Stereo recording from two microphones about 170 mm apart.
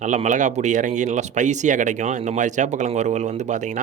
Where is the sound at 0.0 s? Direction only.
45° right (ahead or behind).